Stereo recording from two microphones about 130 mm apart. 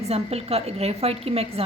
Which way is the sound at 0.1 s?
50° right (ahead or behind).